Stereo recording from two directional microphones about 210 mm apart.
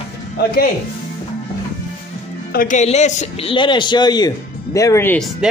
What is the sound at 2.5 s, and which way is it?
A man's voice, 35° left (ahead or behind).